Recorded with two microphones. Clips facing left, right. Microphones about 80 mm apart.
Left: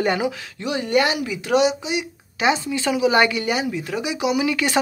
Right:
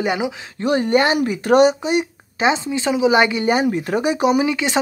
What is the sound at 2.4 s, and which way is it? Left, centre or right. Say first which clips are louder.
A man's voice: right 2 dB; right.